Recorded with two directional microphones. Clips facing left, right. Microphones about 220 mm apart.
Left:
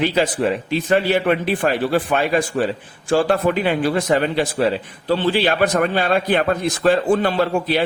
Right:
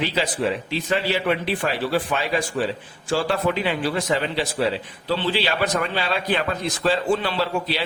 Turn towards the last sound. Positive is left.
turn(degrees=50)  # may be behind; listen again after turning